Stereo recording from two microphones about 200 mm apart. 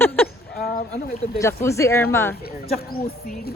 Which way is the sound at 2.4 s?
50° left (ahead or behind).